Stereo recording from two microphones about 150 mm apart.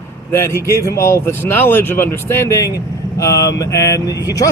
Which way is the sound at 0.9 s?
20° left (ahead or behind).